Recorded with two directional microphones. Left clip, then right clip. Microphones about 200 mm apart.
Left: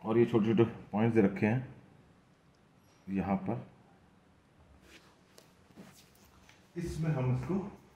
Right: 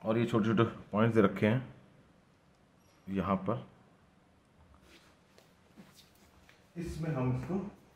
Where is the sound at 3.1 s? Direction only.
30° right (ahead or behind).